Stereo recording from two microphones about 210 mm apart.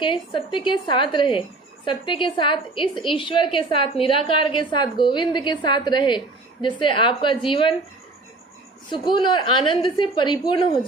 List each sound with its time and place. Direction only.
0.0 s a woman's voice: 25° left (ahead or behind)
8.9 s a woman's voice: 20° left (ahead or behind)